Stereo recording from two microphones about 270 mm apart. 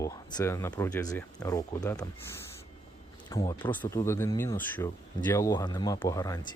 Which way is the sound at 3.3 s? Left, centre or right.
Centre.